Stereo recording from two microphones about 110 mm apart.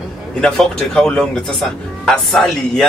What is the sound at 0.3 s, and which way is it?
Speech, 5° left (ahead or behind).